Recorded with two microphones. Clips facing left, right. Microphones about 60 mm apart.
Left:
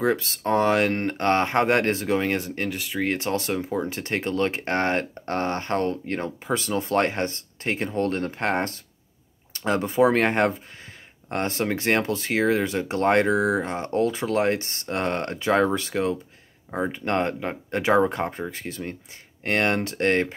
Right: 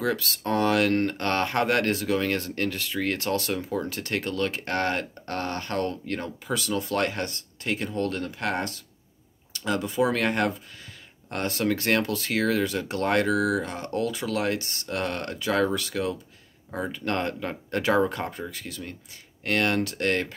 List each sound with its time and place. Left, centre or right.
0.0 s speech: left